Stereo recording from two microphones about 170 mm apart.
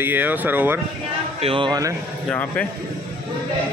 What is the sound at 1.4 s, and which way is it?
Speech, 30° right (ahead or behind).